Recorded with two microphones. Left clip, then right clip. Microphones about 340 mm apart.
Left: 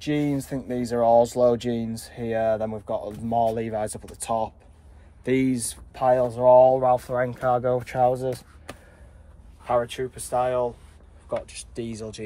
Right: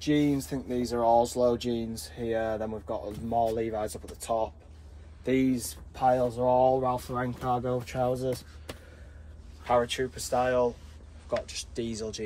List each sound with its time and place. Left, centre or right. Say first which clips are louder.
0.0 s speech: left 1 dB; left
9.7 s speech: left 2 dB; centre